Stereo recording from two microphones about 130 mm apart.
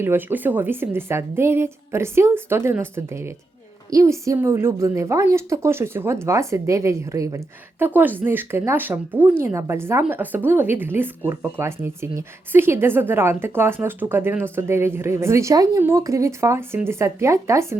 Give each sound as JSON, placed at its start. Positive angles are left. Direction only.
{"t": 0.0, "sound": "a woman's voice", "side_deg": -15}